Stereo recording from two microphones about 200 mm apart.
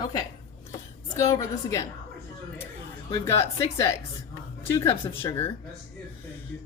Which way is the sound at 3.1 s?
15° left (ahead or behind).